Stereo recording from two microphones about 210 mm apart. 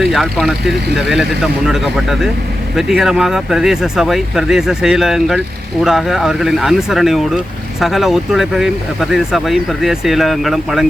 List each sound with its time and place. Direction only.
0.1 s speech: centre (ahead or behind)